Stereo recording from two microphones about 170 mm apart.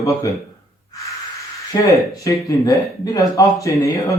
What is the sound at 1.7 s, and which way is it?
Speech, 20° left (ahead or behind).